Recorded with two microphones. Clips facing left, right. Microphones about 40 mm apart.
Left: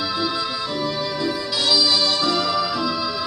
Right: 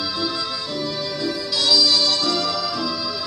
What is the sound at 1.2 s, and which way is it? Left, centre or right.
Music, centre.